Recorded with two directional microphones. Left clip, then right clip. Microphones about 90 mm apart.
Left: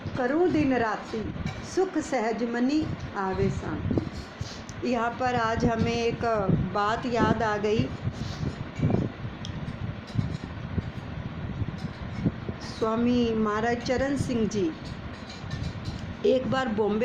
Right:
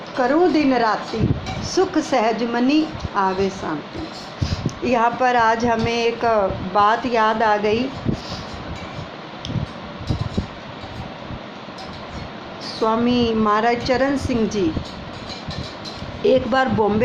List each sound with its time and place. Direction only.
0.2 s a woman's voice: 70° left (ahead or behind)
1.6 s a woman's voice: 40° left (ahead or behind)
4.4 s a woman's voice: 45° left (ahead or behind)
12.8 s a woman's voice: 60° left (ahead or behind)
16.2 s a woman's voice: 60° left (ahead or behind)